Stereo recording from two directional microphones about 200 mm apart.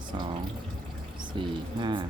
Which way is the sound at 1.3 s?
25° right (ahead or behind).